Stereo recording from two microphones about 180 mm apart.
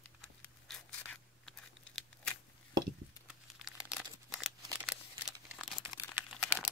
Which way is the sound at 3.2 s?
5° right (ahead or behind).